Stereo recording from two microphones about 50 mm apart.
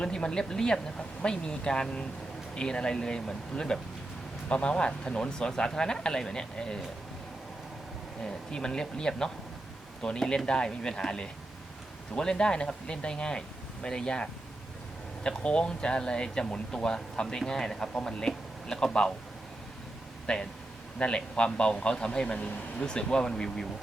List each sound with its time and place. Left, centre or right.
0.0 s speech: centre
8.2 s speech: centre
20.2 s a man's voice: centre